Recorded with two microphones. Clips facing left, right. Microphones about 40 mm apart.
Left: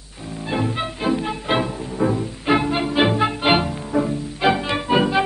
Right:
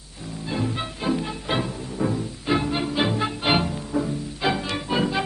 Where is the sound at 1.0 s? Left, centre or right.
Left.